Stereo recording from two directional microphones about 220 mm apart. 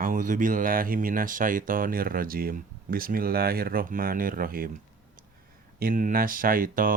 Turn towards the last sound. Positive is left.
turn(degrees=-40)  # may be behind; listen again after turning